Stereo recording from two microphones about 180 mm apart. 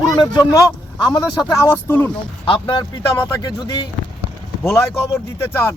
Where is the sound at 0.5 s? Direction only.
25° left (ahead or behind).